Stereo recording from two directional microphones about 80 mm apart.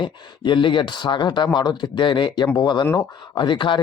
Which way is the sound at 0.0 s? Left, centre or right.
Left.